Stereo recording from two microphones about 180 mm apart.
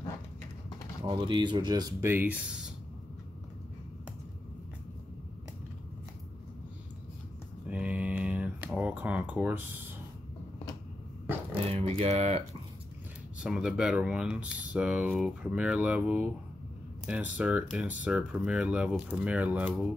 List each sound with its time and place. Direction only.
1.0 s speech: 25° right (ahead or behind); by 2.7 s 5° right (ahead or behind)
7.7 s a sound: 5° right (ahead or behind)
11.6 s speech: 35° right (ahead or behind)
13.4 s speech: 5° right (ahead or behind)